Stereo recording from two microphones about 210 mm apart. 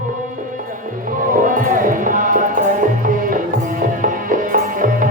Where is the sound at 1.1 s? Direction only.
40° right (ahead or behind).